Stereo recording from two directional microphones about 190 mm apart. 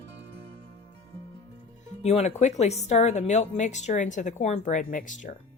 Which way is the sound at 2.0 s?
35° left (ahead or behind).